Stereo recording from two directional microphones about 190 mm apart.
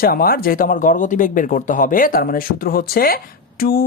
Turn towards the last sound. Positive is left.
turn(degrees=50)  # may be behind; listen again after turning